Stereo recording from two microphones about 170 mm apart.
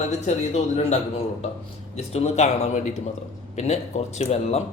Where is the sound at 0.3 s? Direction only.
40° left (ahead or behind).